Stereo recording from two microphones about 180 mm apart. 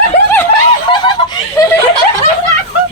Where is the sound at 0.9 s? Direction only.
25° left (ahead or behind).